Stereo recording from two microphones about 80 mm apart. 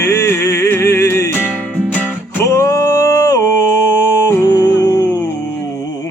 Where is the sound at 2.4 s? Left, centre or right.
Left.